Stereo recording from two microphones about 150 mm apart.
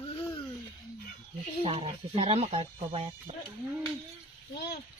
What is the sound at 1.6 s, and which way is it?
Speech, 40° right (ahead or behind).